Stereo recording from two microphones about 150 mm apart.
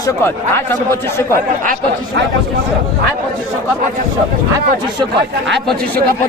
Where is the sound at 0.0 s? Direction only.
15° left (ahead or behind).